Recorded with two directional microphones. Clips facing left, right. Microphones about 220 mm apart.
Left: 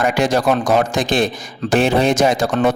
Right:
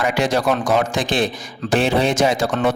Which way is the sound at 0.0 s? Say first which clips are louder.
Left 2 dB; 45° left (ahead or behind).